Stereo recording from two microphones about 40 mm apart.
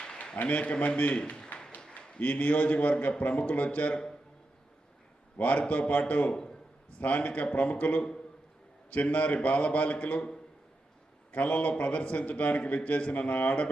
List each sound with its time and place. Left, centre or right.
0.3 s a man's voice: left
1.3 s a sound: left
1.8 s a man's voice: left
5.4 s a man's voice: left
6.3 s a sound: centre
6.9 s a man's voice: left
11.3 s a man's voice: left